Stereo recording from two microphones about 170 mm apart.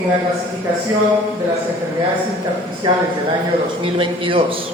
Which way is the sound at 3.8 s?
30° right (ahead or behind).